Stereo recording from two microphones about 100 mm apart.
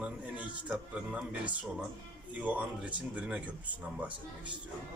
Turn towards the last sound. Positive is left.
turn(degrees=-15)  # may be behind; listen again after turning